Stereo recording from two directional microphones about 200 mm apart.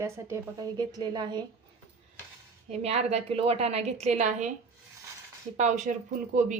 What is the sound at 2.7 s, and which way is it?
A woman's voice, 35° right (ahead or behind).